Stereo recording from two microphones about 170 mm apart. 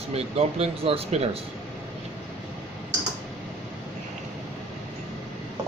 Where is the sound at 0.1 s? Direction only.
35° right (ahead or behind).